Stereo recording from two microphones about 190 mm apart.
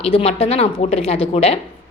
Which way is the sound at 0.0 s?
30° left (ahead or behind).